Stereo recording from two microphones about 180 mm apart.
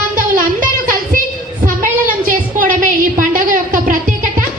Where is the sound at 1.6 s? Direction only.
50° right (ahead or behind).